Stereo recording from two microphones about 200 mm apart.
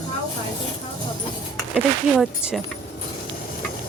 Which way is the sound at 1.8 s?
5° right (ahead or behind).